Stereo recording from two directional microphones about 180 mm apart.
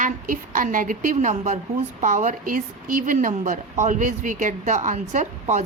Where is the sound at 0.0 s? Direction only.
45° right (ahead or behind).